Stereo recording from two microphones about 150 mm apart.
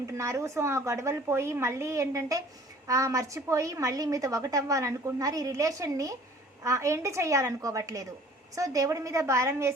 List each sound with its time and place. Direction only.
0.1 s a woman's voice: 20° right (ahead or behind)